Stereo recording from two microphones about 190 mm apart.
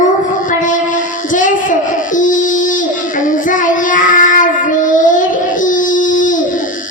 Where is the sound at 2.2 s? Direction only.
45° left (ahead or behind).